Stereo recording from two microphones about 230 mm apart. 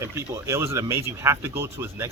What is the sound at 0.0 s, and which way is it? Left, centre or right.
Speech, centre.